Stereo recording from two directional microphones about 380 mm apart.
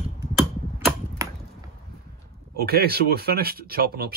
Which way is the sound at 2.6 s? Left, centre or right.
Right.